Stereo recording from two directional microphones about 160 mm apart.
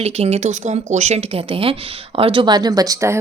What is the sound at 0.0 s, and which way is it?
A woman's voice, 40° right (ahead or behind).